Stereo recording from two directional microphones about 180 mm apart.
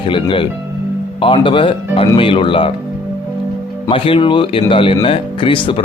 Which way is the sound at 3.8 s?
30° left (ahead or behind).